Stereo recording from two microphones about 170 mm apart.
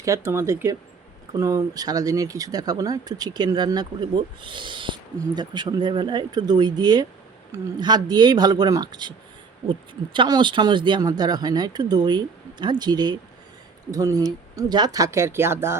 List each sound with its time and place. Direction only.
0.0 s speech: 15° right (ahead or behind)